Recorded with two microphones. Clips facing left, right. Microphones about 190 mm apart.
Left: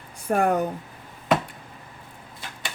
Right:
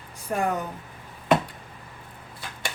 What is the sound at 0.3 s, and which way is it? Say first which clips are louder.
Speech: left 5 dB; 55° left (ahead or behind).